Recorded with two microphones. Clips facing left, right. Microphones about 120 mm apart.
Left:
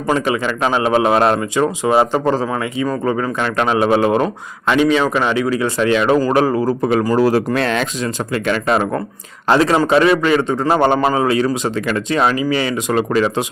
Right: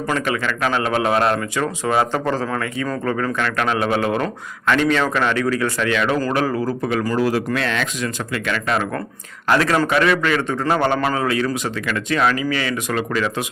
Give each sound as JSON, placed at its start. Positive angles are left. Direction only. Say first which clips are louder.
{"t": 0.1, "sound": "a man's voice", "louder": "left 6 dB", "side_deg": 25}
{"t": 4.8, "sound": "a man's voice", "louder": "left 5 dB", "side_deg": 10}
{"t": 7.3, "sound": "a man's voice", "louder": "left 5 dB", "side_deg": 40}